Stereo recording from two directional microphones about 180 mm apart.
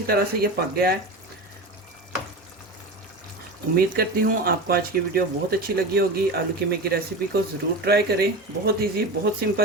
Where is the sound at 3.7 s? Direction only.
55° right (ahead or behind).